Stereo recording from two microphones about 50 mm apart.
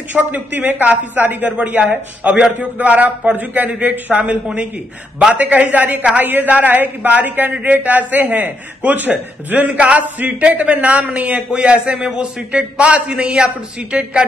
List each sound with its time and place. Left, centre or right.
0.1 s a man's voice: right
1.8 s a man's voice: right
4.1 s a man's voice: right